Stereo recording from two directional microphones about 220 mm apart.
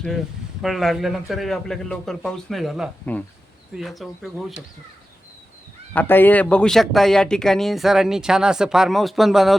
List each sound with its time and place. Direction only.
0.6 s speech: centre (ahead or behind)
5.9 s speech: 10° left (ahead or behind)